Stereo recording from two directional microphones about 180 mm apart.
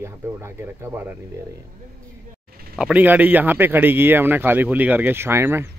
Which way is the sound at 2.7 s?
5° right (ahead or behind).